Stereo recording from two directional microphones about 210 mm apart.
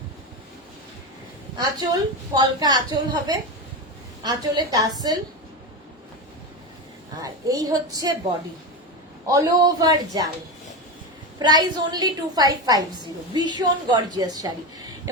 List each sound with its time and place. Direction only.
1.5 s a woman's voice: 20° right (ahead or behind)
7.2 s a man's voice: 15° right (ahead or behind)
9.2 s a man's voice: 15° right (ahead or behind)
11.3 s a woman's voice: 20° right (ahead or behind)